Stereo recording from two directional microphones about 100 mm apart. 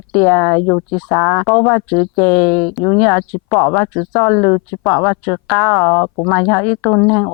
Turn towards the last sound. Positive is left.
turn(degrees=20)  # may be behind; listen again after turning